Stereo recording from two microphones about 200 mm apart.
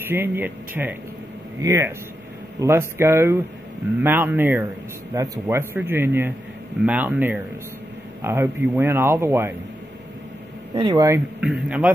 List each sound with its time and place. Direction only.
0.0 s speech: 10° right (ahead or behind)
10.7 s speech: 20° right (ahead or behind)
11.4 s a man's voice: 5° right (ahead or behind)